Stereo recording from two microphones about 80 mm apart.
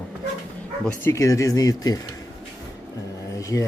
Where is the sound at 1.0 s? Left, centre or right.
Left.